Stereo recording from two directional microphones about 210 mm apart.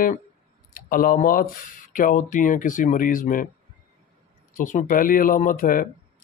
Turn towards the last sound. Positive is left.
turn(degrees=40)  # may be behind; listen again after turning